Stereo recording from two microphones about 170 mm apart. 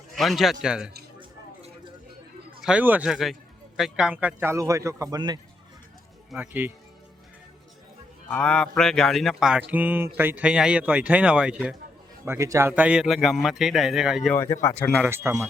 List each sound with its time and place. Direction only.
0.2 s a man's voice: centre (ahead or behind)
2.6 s a man's voice: 5° right (ahead or behind); by 5.4 s 25° right (ahead or behind)
6.3 s a man's voice: 10° right (ahead or behind)
8.3 s a man's voice: 5° left (ahead or behind)
14.3 s speech: 15° left (ahead or behind)
15.1 s a man's voice: 15° right (ahead or behind)